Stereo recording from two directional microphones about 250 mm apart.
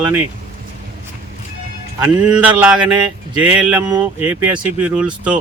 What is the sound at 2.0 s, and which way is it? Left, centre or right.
Speech, centre.